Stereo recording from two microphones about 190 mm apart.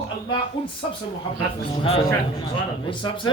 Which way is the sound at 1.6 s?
30° left (ahead or behind).